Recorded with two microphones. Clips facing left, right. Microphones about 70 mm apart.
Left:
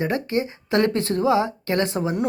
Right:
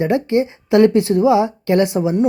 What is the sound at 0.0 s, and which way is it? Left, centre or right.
A woman's voice, right.